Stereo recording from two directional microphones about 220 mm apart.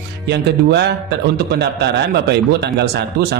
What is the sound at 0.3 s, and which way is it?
Speech, 50° right (ahead or behind).